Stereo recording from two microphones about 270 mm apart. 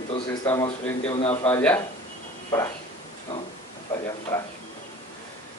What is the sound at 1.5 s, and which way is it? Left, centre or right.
Speech, centre.